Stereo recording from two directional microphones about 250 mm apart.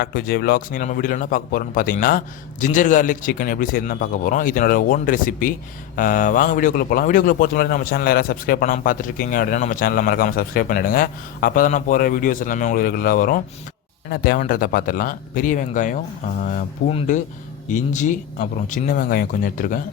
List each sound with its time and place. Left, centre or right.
0.0 s a man's voice: left